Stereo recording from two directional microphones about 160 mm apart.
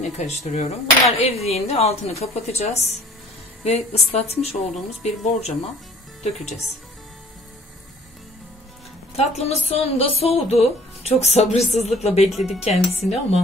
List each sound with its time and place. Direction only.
0.0 s speech: 45° left (ahead or behind)
9.1 s speech: 40° left (ahead or behind)
12.3 s a woman's voice: centre (ahead or behind)
12.5 s speech: 40° left (ahead or behind)